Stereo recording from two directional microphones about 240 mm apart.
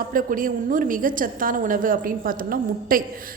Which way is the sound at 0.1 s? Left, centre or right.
Right.